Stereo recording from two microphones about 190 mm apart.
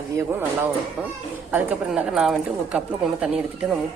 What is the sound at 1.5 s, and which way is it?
A woman's voice, 5° right (ahead or behind).